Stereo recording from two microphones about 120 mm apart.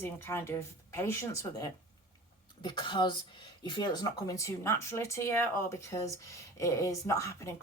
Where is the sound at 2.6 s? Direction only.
40° left (ahead or behind); by 5.5 s 20° left (ahead or behind).